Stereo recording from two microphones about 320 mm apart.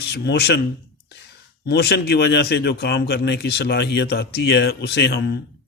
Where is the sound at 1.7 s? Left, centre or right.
Left.